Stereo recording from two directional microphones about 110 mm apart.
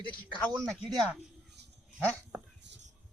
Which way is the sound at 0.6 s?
Centre (ahead or behind).